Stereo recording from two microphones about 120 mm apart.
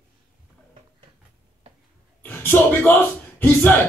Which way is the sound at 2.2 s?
15° left (ahead or behind).